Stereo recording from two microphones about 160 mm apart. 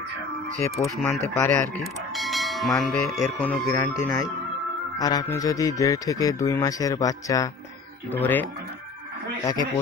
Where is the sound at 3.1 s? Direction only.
10° left (ahead or behind).